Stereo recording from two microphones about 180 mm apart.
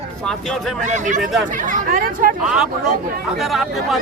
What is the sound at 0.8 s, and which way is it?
Speech, 45° right (ahead or behind).